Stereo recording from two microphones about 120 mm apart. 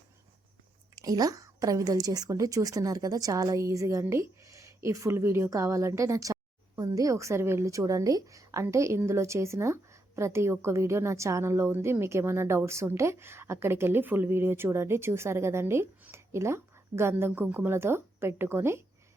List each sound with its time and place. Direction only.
0.9 s a woman's voice: 30° right (ahead or behind)